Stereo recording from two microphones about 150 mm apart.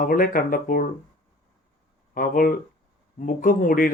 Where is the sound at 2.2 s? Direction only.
70° left (ahead or behind).